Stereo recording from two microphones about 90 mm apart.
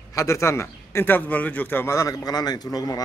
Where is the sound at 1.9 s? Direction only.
40° left (ahead or behind).